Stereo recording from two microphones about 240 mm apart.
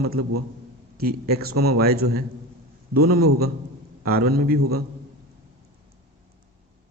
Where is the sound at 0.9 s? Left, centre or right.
Right.